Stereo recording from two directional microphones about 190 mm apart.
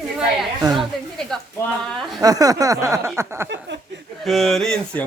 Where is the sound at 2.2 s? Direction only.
20° right (ahead or behind).